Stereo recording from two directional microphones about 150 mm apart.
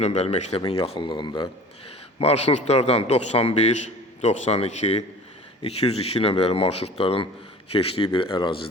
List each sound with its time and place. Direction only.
0.0 s speech: 45° left (ahead or behind)
0.7 s speech: 35° left (ahead or behind)
2.1 s speech: 45° left (ahead or behind)